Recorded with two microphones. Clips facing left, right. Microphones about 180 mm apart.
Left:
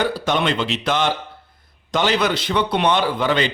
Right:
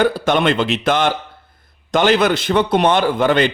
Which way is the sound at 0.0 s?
55° right (ahead or behind).